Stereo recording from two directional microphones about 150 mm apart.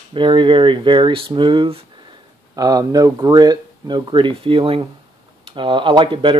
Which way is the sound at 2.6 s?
25° right (ahead or behind).